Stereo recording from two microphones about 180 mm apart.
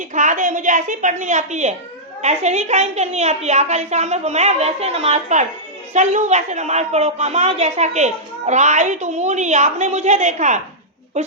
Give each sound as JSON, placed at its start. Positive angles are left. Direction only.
{"t": 0.1, "sound": "a woman's voice", "side_deg": -45}